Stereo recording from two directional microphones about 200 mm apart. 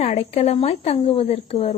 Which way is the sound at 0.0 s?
30° left (ahead or behind).